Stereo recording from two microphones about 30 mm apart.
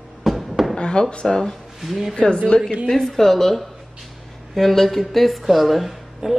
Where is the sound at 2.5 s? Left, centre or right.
Left.